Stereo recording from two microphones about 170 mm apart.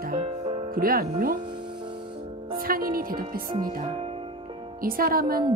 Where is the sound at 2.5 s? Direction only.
60° right (ahead or behind).